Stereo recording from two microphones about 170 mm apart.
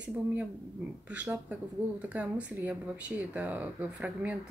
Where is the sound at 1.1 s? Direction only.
10° right (ahead or behind).